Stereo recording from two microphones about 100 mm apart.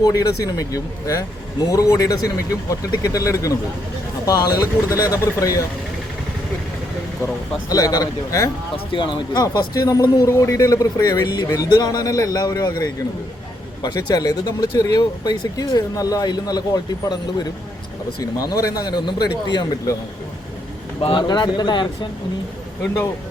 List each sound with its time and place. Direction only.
0.0 s speech: 35° left (ahead or behind)
7.7 s speech: 35° left (ahead or behind)
8.7 s speech: 55° left (ahead or behind)
9.4 s speech: 40° left (ahead or behind)
18.2 s speech: 35° left (ahead or behind)
21.0 s speech: 60° left (ahead or behind)
21.2 s speech: 45° left (ahead or behind)